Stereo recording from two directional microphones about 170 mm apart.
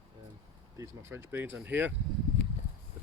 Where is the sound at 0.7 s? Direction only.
15° right (ahead or behind).